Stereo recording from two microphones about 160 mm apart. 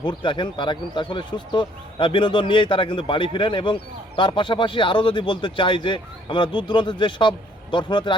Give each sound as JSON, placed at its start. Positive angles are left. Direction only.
{"t": 0.0, "sound": "speech", "side_deg": 30}